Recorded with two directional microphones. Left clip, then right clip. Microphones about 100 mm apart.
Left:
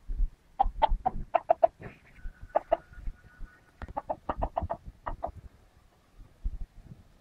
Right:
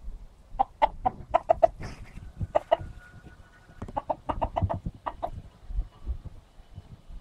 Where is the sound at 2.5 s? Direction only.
25° right (ahead or behind).